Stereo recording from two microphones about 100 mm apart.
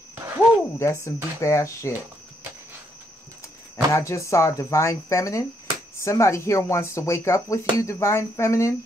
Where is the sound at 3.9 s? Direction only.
30° left (ahead or behind).